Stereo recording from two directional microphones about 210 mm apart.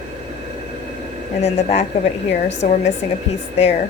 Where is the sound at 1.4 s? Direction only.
30° left (ahead or behind).